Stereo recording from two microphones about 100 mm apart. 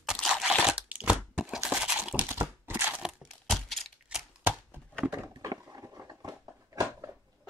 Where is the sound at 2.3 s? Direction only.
20° right (ahead or behind).